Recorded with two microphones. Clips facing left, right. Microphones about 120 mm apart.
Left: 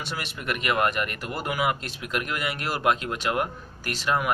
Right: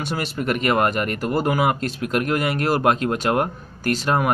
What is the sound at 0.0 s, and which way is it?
A man's voice, 40° right (ahead or behind).